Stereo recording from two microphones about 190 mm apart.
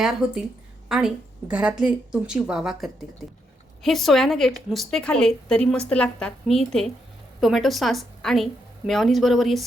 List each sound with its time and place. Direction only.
0.0 s a woman's voice: 5° right (ahead or behind)